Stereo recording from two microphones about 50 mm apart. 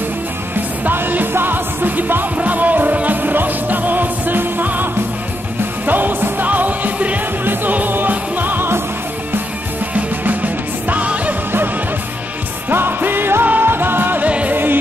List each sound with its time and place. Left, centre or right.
0.8 s music: right
5.9 s music: right
9.9 s music: right
12.6 s music: right
14.2 s music: right
14.5 s music: right